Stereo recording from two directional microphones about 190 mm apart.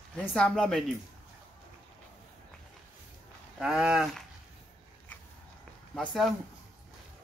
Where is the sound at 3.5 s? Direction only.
5° right (ahead or behind).